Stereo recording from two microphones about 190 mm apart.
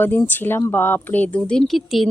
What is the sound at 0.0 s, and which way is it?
Speech, 10° left (ahead or behind).